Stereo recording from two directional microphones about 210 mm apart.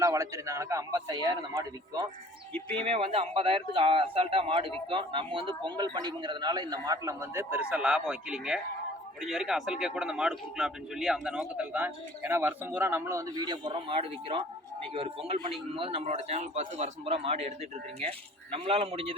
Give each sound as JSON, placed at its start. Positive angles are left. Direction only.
{"t": 0.0, "sound": "a man's voice", "side_deg": -15}
{"t": 18.5, "sound": "a man's voice", "side_deg": -25}